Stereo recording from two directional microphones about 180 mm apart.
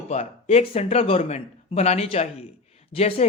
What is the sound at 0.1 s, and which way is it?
A man's voice, 40° left (ahead or behind).